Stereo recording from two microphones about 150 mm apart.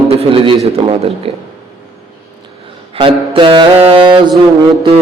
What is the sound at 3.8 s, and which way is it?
Mantra, 35° right (ahead or behind).